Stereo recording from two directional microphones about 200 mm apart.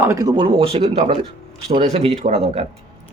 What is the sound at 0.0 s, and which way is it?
Speech, 15° right (ahead or behind).